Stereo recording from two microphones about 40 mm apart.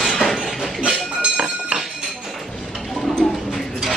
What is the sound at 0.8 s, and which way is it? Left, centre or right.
Chink, right.